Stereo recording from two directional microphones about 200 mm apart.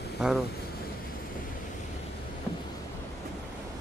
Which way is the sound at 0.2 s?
5° right (ahead or behind).